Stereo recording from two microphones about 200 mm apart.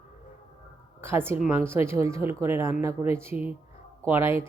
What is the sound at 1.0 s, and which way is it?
Speech, 10° right (ahead or behind).